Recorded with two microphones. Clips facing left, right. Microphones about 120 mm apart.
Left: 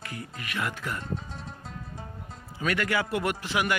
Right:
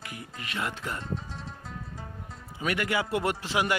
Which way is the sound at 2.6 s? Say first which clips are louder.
Left 1 dB; 20° right (ahead or behind).